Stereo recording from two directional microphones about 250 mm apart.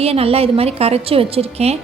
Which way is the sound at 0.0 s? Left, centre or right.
Right.